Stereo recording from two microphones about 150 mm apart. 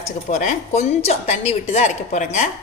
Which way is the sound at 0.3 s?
55° left (ahead or behind).